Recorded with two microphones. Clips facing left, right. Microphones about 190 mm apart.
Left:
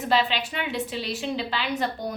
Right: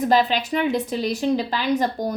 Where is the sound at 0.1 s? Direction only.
45° right (ahead or behind).